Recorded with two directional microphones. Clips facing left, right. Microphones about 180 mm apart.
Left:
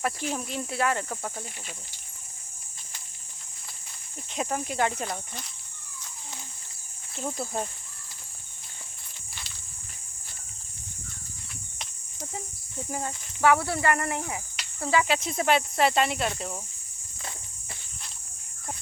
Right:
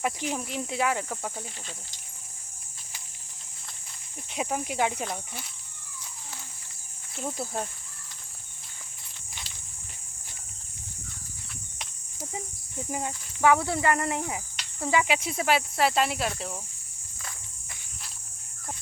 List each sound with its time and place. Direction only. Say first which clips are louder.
0.0 s speech: even; 15° right (ahead or behind)
4.4 s speech: even; 10° right (ahead or behind)
5.0 s cricket: even; 5° right (ahead or behind)
7.2 s cricket: left 1 dB; 5° right (ahead or behind)
11.8 s cricket: even; 10° right (ahead or behind)
12.9 s speech: right 1 dB; 15° right (ahead or behind)
14.8 s cricket: left 1 dB; 15° right (ahead or behind)